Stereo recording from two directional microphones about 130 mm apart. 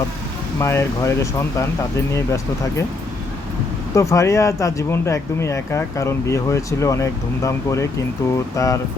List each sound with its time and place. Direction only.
0.6 s speech: 20° left (ahead or behind)
3.9 s speech: 25° left (ahead or behind)